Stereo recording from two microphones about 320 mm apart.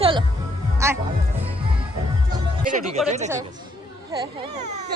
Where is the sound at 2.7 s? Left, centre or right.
Right.